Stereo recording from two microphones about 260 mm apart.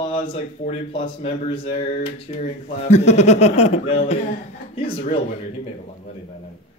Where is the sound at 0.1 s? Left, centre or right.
Left.